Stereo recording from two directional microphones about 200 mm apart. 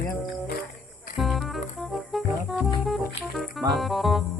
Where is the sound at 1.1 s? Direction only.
Centre (ahead or behind).